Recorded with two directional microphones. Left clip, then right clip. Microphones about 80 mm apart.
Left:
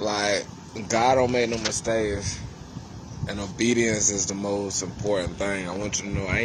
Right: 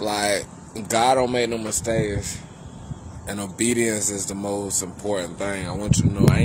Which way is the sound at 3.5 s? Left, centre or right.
Right.